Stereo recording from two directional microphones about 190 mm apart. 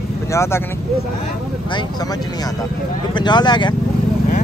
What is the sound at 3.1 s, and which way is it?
Speech, 25° left (ahead or behind).